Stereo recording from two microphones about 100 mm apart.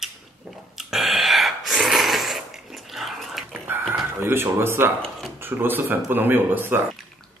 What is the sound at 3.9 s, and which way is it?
Speech, 25° right (ahead or behind).